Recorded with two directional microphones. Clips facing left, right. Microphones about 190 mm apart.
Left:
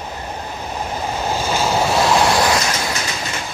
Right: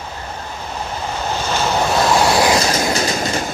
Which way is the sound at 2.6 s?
35° right (ahead or behind).